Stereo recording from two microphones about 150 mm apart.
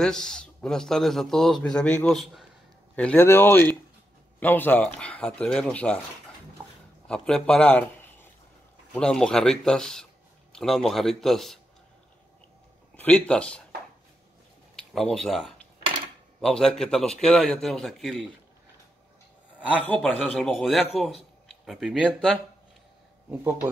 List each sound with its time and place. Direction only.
0.0 s speech: 5° left (ahead or behind)
3.0 s speech: 10° left (ahead or behind)
7.1 s a man's voice: 5° left (ahead or behind)
12.9 s speech: 10° left (ahead or behind)
14.9 s speech: centre (ahead or behind)
20.0 s speech: centre (ahead or behind)